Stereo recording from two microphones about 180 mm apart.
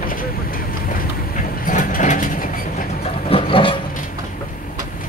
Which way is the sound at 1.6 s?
45° left (ahead or behind).